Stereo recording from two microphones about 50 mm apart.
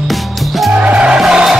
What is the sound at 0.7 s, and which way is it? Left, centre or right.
Music, right.